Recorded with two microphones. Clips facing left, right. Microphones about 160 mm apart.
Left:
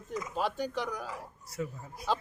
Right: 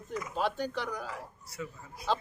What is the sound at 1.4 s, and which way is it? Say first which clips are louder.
Speech: left 8 dB; 45° left (ahead or behind).